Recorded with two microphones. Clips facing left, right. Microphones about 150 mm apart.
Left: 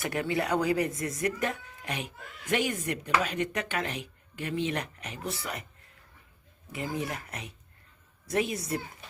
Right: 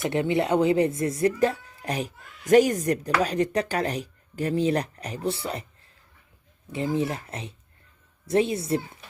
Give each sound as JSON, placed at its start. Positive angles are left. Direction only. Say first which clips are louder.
{"t": 0.0, "sound": "speech", "louder": "right 6 dB", "side_deg": -25}